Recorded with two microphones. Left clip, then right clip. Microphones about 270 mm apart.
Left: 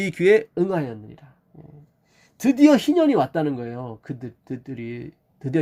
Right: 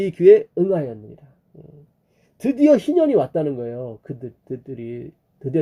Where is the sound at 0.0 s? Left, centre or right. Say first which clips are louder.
Right 5 dB; left.